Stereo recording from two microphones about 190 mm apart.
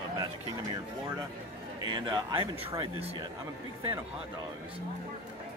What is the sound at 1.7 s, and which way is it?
A man's voice, 25° right (ahead or behind).